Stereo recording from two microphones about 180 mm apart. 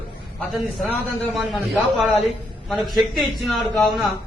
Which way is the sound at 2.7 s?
Centre (ahead or behind).